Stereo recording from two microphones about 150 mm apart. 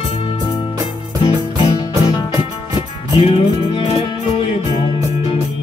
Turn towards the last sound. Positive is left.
turn(degrees=35)  # may be behind; listen again after turning